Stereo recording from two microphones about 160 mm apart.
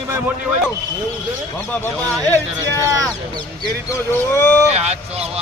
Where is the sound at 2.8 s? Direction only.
20° right (ahead or behind).